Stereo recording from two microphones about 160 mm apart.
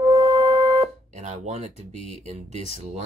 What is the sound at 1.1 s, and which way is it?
Speech, 45° right (ahead or behind).